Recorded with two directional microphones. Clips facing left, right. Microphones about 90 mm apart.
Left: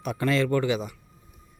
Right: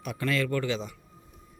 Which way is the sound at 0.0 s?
35° left (ahead or behind).